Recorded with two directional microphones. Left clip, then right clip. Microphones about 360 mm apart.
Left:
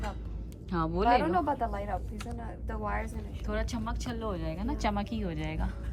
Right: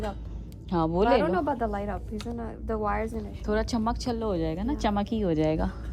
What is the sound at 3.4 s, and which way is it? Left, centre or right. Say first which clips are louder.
A woman's voice: right 8 dB; centre.